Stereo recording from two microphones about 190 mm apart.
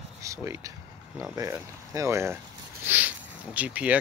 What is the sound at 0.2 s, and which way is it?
Speech, 15° right (ahead or behind).